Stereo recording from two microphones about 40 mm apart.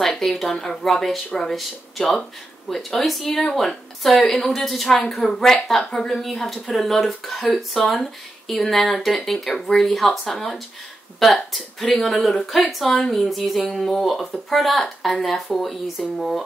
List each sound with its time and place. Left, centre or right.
0.0 s speech: centre
3.3 s speech: centre
4.8 s speech: centre